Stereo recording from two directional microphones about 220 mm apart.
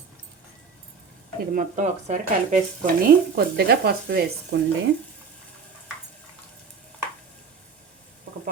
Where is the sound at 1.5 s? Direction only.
35° right (ahead or behind).